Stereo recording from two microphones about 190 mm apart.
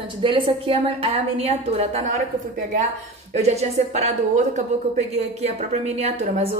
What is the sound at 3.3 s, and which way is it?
A woman's voice, 35° right (ahead or behind).